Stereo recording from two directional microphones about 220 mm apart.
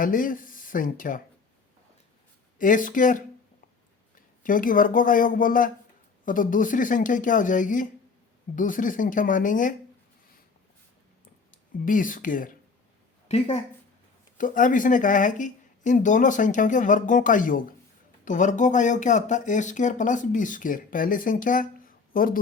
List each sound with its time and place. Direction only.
0.0 s speech: 40° left (ahead or behind)
2.6 s speech: 35° left (ahead or behind)
11.9 s speech: 35° left (ahead or behind)